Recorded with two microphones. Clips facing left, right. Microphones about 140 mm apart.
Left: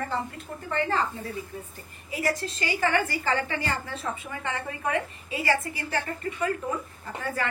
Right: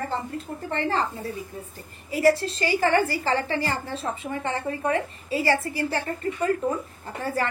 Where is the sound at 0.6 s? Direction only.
30° right (ahead or behind).